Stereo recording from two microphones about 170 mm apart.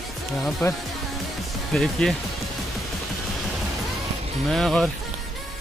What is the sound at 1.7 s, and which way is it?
Speech, centre (ahead or behind).